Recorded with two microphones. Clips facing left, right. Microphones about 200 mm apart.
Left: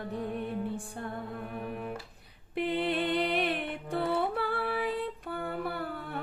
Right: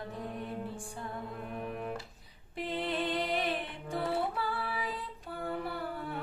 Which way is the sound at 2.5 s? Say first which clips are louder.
Left 5 dB; 65° left (ahead or behind).